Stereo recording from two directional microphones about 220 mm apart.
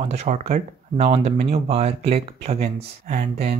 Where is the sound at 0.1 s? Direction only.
30° right (ahead or behind).